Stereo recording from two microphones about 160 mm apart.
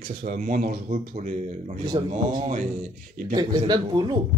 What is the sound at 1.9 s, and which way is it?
Speech, 25° right (ahead or behind).